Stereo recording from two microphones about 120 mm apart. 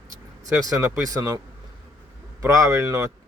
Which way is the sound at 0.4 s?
30° right (ahead or behind).